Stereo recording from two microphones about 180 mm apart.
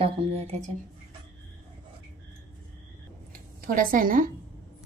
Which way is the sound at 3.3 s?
50° right (ahead or behind).